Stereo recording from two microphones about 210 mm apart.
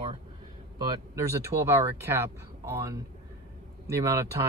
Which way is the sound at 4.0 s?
15° right (ahead or behind).